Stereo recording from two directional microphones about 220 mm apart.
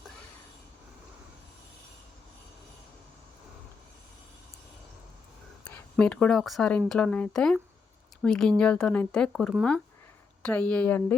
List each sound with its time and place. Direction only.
5.6 s speech: 5° left (ahead or behind)